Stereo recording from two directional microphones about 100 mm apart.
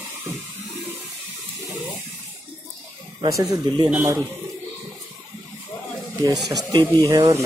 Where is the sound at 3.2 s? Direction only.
35° right (ahead or behind).